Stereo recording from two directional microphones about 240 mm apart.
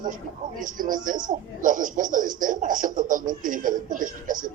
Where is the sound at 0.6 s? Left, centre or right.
Right.